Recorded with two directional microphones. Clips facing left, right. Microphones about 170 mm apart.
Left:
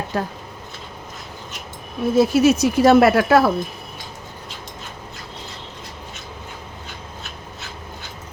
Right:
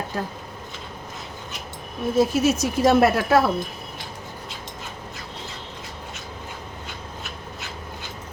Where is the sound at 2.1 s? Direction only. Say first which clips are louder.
Left 5 dB; 75° left (ahead or behind).